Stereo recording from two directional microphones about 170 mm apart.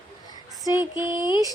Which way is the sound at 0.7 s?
15° right (ahead or behind).